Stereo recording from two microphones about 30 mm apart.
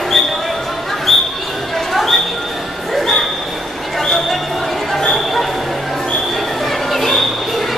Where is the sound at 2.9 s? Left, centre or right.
Centre.